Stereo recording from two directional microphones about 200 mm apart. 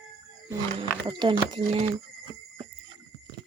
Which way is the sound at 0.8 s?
25° right (ahead or behind).